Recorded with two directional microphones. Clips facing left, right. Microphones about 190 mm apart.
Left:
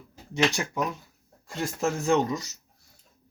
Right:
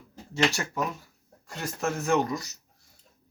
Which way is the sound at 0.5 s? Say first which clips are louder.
Left 1 dB; 15° left (ahead or behind).